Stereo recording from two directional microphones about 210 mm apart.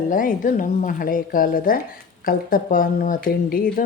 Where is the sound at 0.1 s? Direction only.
40° left (ahead or behind).